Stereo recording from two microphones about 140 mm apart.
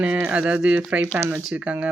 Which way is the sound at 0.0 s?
10° right (ahead or behind).